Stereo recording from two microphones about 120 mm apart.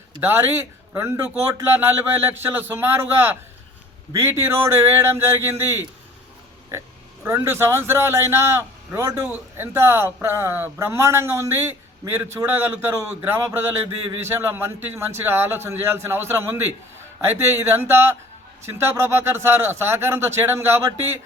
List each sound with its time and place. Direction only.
0.2 s a man's voice: 20° right (ahead or behind)
7.3 s a man's voice: 20° right (ahead or behind)